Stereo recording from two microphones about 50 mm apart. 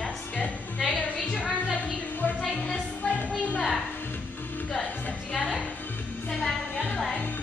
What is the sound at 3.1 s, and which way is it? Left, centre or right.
Music, left.